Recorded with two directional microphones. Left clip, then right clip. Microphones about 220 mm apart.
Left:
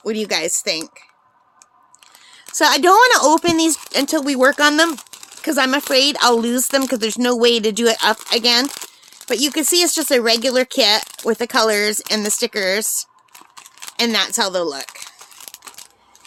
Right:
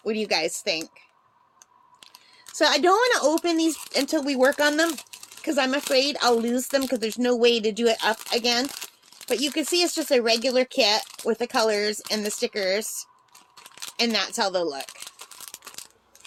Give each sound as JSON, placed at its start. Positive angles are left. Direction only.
{"t": 0.0, "sound": "speech", "side_deg": 25}
{"t": 2.6, "sound": "speech", "side_deg": 30}